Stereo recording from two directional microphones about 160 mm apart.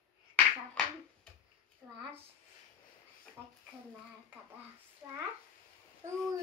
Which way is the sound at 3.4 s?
15° right (ahead or behind).